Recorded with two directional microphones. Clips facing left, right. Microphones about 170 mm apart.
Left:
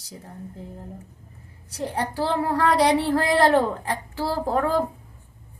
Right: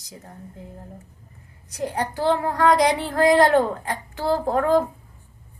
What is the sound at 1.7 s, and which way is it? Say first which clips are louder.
Child singing: right 1 dB; 30° left (ahead or behind).